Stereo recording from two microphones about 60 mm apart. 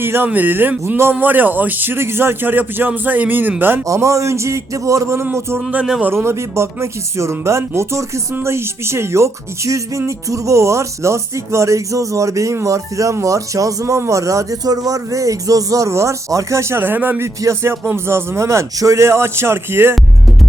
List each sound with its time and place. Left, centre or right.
0.0 s a man's voice: right
3.8 s speech: right
16.8 s a man's voice: right
17.2 s speech: right